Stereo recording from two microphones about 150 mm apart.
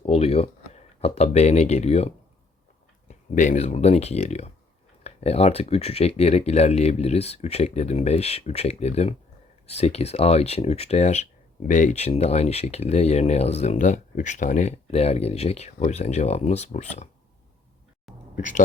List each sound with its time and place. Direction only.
0.0 s speech: 40° left (ahead or behind)
18.3 s speech: 60° left (ahead or behind)